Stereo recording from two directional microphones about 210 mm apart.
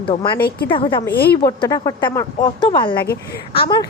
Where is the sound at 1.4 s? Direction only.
15° left (ahead or behind).